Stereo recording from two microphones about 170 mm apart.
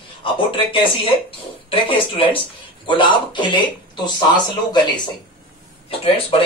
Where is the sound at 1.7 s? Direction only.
30° left (ahead or behind).